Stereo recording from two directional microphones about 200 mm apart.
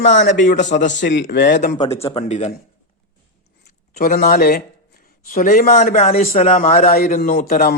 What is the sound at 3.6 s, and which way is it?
A man's voice, 45° left (ahead or behind).